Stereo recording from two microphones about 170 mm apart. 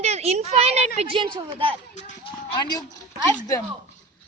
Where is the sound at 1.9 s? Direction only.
40° left (ahead or behind).